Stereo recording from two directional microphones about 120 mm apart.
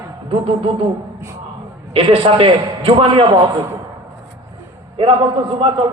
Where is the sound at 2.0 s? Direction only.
45° right (ahead or behind).